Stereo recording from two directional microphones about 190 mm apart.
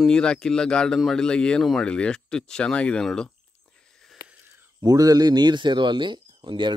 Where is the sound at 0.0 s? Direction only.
5° left (ahead or behind).